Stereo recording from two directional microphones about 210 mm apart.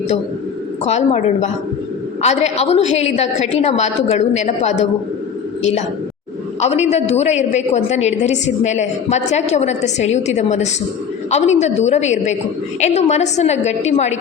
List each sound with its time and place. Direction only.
0.9 s a woman's voice: 30° left (ahead or behind)
6.6 s a woman's voice: 30° left (ahead or behind)